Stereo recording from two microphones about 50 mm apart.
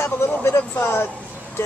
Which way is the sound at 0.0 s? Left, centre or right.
Left.